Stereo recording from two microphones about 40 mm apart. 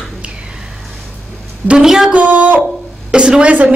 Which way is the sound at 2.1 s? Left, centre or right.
Right.